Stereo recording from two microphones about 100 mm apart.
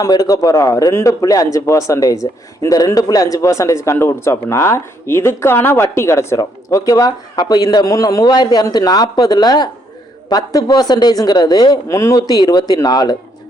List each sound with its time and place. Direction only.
0.0 s a man's voice: 35° left (ahead or behind)